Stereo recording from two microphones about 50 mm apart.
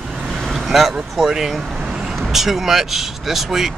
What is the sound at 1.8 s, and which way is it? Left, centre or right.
Vehicle, centre.